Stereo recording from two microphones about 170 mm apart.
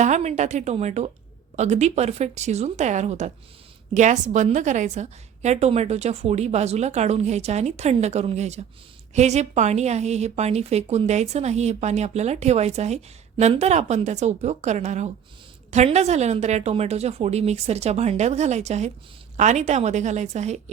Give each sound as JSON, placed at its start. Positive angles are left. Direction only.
{"t": 0.0, "sound": "a woman's voice", "side_deg": -40}